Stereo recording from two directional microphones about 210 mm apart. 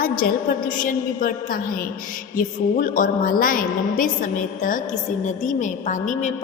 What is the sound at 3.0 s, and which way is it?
A woman's voice, 40° left (ahead or behind).